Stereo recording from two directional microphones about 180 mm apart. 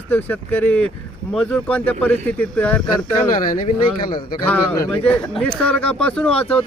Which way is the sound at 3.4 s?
50° left (ahead or behind).